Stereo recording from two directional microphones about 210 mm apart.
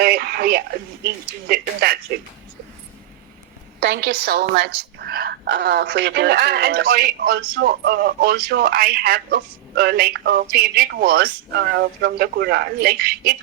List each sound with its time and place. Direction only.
0.0 s a woman's voice: 50° right (ahead or behind)
3.8 s a woman's voice: 55° right (ahead or behind)